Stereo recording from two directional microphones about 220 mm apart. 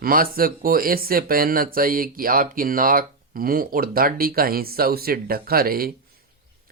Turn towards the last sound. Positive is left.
turn(degrees=-45)  # may be behind; listen again after turning